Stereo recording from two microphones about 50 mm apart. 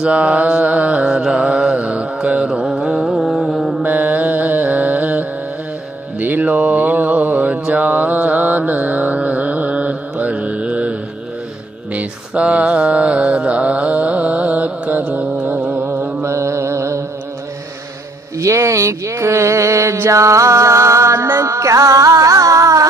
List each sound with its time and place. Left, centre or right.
0.0 s mantra: right
2.2 s music: right; by 3.8 s centre
4.1 s carnatic music: right
6.1 s mantra: right
15.7 s music: right
16.3 s mantra: right
18.4 s a sound: right